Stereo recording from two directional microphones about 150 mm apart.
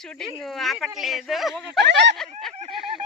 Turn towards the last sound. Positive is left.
turn(degrees=0)  # may be behind; listen again after turning